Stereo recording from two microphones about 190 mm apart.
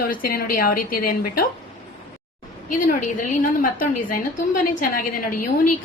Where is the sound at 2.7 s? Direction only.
45° left (ahead or behind).